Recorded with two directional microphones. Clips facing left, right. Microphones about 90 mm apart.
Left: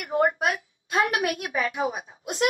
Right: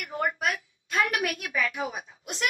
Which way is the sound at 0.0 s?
30° left (ahead or behind).